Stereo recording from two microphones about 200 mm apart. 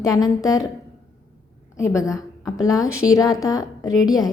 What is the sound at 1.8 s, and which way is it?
A woman's voice, 15° left (ahead or behind).